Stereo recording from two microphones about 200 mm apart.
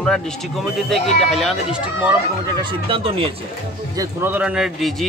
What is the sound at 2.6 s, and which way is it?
Speech, 25° right (ahead or behind).